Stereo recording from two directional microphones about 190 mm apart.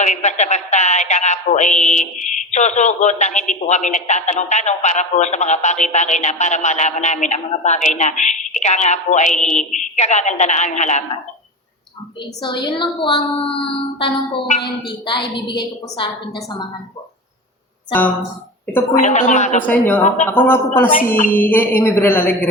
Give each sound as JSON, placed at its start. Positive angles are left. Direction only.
{"t": 0.0, "sound": "speech", "side_deg": 40}
{"t": 12.6, "sound": "a woman's voice", "side_deg": 25}
{"t": 18.9, "sound": "speech", "side_deg": 40}
{"t": 19.6, "sound": "speech", "side_deg": 10}